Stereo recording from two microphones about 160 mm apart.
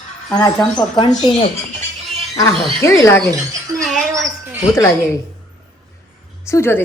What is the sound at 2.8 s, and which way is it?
Speech, 15° left (ahead or behind).